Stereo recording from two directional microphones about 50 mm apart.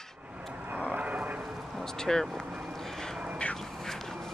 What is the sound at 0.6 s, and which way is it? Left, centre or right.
Vehicle, right.